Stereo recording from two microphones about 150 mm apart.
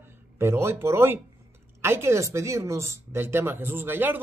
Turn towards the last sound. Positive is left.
turn(degrees=-15)  # may be behind; listen again after turning